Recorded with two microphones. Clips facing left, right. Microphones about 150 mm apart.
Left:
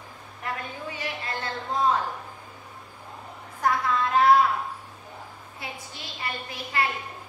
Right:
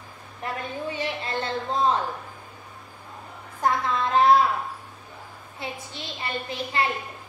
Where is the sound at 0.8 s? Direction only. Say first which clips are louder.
Right 4 dB; 25° right (ahead or behind).